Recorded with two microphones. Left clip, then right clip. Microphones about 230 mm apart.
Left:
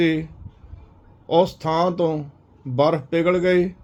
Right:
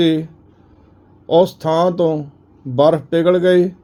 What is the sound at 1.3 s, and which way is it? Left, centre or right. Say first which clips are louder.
Speech: right 5 dB; right.